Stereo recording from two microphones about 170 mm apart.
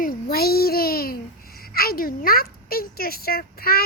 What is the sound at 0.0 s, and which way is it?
A child's voice, 60° left (ahead or behind).